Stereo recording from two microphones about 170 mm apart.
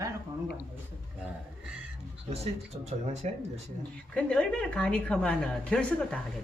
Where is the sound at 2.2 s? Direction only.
40° right (ahead or behind).